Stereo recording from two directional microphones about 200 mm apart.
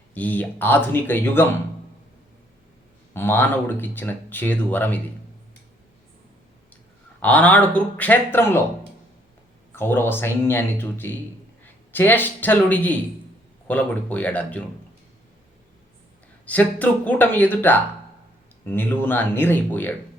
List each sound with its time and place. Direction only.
0.1 s speech: 10° left (ahead or behind)
3.1 s speech: 10° left (ahead or behind)
7.2 s speech: 5° left (ahead or behind)
9.7 s a man's voice: 10° left (ahead or behind)
16.5 s speech: 10° left (ahead or behind)